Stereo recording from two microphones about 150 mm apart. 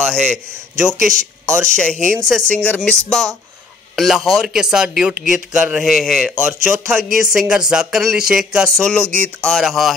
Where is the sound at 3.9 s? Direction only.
Centre (ahead or behind).